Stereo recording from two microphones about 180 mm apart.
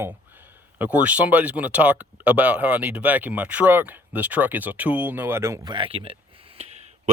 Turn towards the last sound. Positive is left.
turn(degrees=-30)  # may be behind; listen again after turning